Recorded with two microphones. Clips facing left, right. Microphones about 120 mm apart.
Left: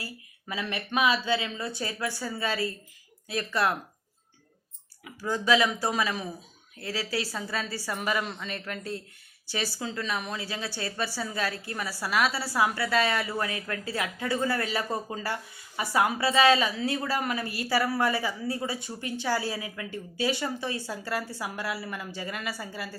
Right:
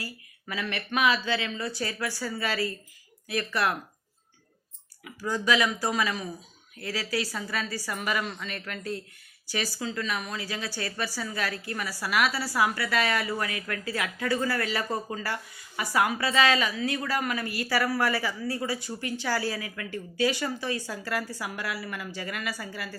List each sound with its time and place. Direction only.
0.0 s a woman's voice: 25° left (ahead or behind)
5.0 s a woman's voice: 25° left (ahead or behind)